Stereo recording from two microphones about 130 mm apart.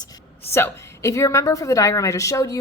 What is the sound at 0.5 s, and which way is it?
A woman's voice, 20° left (ahead or behind).